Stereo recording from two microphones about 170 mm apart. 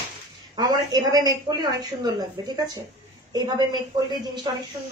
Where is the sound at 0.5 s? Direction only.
25° right (ahead or behind).